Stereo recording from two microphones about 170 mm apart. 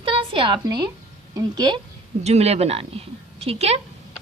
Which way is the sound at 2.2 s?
40° right (ahead or behind).